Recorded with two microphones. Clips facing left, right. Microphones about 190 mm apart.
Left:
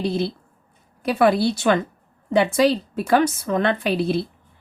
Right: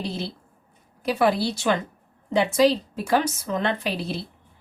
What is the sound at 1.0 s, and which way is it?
A woman's voice, 55° left (ahead or behind).